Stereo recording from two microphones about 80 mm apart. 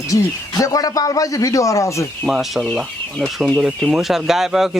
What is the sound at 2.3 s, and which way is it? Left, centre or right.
Speech, centre.